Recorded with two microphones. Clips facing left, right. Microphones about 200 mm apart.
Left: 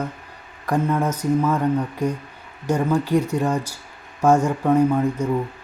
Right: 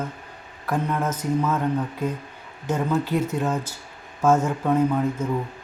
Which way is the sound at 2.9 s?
10° left (ahead or behind).